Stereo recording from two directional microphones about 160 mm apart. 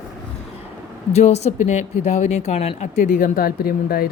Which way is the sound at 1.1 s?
45° left (ahead or behind).